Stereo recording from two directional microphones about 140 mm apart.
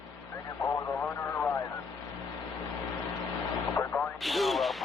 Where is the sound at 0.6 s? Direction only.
15° left (ahead or behind).